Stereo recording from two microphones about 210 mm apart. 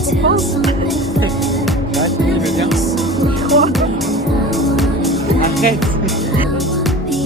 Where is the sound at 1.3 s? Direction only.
Centre (ahead or behind).